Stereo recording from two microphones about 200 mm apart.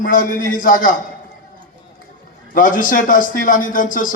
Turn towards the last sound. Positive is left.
turn(degrees=40)  # may be behind; listen again after turning